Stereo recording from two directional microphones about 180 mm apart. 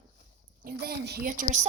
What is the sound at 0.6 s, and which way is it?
Speech, 60° right (ahead or behind).